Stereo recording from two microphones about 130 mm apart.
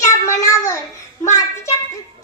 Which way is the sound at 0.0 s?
25° left (ahead or behind).